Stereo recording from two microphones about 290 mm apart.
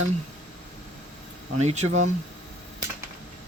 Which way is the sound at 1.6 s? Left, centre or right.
Right.